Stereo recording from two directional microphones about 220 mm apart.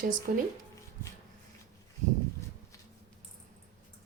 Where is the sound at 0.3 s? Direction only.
40° right (ahead or behind).